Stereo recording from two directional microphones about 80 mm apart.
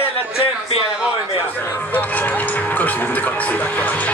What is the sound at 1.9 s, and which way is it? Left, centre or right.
Speech, left.